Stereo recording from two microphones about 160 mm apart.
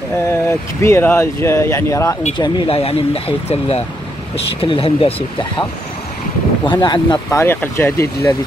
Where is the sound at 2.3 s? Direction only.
30° left (ahead or behind).